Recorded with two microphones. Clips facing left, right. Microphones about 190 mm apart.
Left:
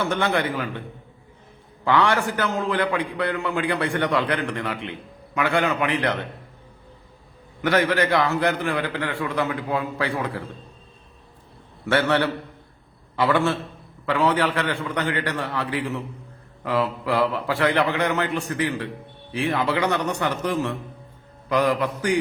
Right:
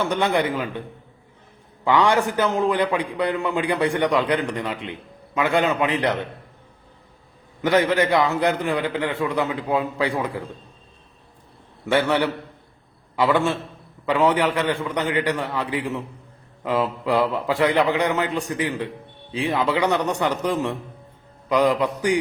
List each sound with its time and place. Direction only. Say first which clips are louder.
0.0 s a man's voice: right 2 dB; 15° right (ahead or behind)
1.8 s a man's voice: right 2 dB; 15° right (ahead or behind)
7.6 s a man's voice: right 2 dB; 15° right (ahead or behind)
11.9 s a man's voice: right 1 dB; 15° right (ahead or behind)